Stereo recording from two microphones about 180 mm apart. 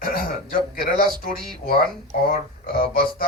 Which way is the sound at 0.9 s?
50° left (ahead or behind).